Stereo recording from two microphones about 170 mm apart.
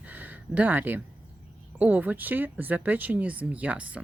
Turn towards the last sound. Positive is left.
turn(degrees=-10)  # may be behind; listen again after turning